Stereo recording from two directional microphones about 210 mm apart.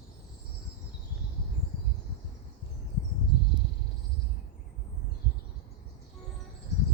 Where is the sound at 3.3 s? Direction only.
50° left (ahead or behind).